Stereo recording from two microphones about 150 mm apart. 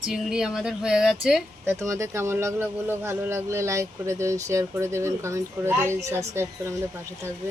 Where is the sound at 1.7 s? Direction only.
20° right (ahead or behind).